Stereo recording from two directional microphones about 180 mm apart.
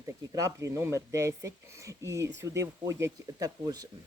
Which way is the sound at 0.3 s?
15° right (ahead or behind).